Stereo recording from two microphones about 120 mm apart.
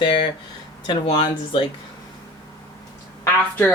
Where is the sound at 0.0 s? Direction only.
45° left (ahead or behind).